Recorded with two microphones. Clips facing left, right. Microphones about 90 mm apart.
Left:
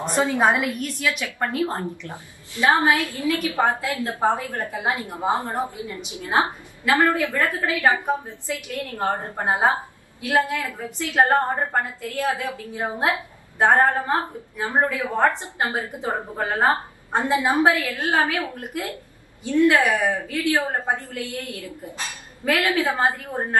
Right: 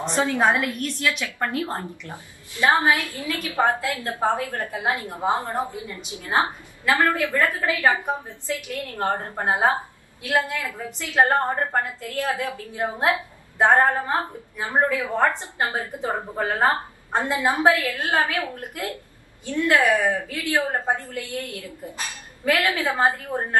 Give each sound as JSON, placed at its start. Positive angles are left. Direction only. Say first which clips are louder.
{"t": 0.1, "sound": "a woman's voice", "louder": "left 1 dB", "side_deg": 15}
{"t": 1.2, "sound": "a woman's voice", "louder": "left 2 dB", "side_deg": 15}
{"t": 14.6, "sound": "a woman's voice", "louder": "even", "side_deg": 20}